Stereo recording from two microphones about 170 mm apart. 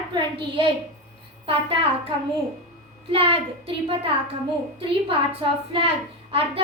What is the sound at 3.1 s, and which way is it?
Speech, 35° right (ahead or behind).